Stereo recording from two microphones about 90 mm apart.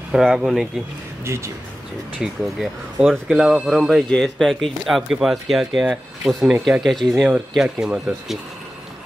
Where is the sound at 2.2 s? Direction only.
Centre (ahead or behind).